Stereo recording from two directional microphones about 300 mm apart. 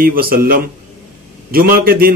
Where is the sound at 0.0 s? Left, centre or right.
Right.